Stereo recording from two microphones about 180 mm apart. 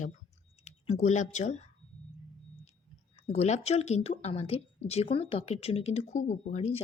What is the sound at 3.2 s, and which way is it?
Speech, 35° left (ahead or behind).